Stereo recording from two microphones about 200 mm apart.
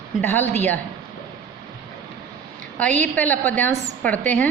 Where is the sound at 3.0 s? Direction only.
10° left (ahead or behind).